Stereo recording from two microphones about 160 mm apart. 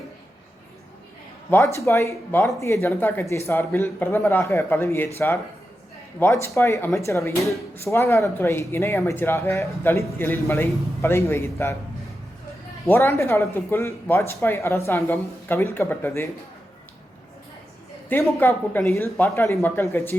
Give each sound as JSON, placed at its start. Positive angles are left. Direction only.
{"t": 1.7, "sound": "speech", "side_deg": 15}
{"t": 12.9, "sound": "speech", "side_deg": 15}
{"t": 18.1, "sound": "speech", "side_deg": 10}